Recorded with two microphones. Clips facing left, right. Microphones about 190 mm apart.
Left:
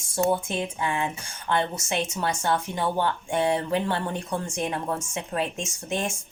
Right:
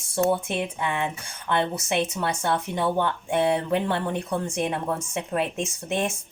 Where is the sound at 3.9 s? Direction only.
60° right (ahead or behind).